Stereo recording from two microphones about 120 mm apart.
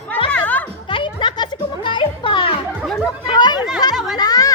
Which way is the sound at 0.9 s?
45° left (ahead or behind).